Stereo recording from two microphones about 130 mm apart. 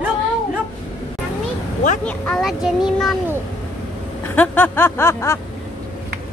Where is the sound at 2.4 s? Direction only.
5° right (ahead or behind).